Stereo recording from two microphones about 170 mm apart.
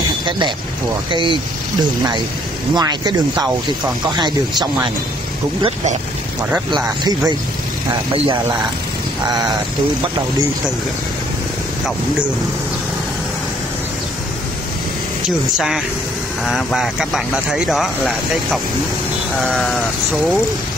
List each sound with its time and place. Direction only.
1.1 s speech: 30° right (ahead or behind)
2.7 s speech: 25° right (ahead or behind)
6.7 s speech: 25° right (ahead or behind)
15.2 s speech: centre (ahead or behind)